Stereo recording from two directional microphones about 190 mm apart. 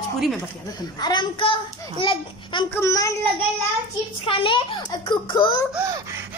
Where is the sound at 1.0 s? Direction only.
25° left (ahead or behind).